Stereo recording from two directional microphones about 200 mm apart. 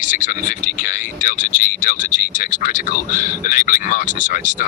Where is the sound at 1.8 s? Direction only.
40° left (ahead or behind).